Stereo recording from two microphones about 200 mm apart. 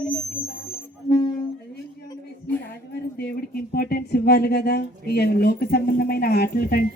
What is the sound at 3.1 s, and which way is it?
Speech, 50° left (ahead or behind).